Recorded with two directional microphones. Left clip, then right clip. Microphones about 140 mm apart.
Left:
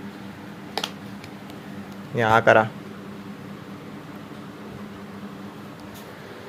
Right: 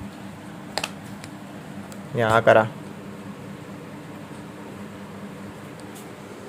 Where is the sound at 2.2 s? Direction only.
Centre (ahead or behind).